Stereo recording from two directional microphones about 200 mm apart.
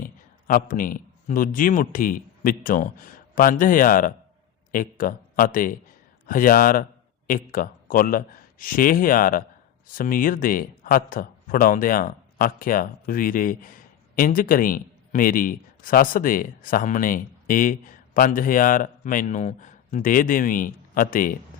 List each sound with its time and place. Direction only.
0.0 s speech: 45° left (ahead or behind)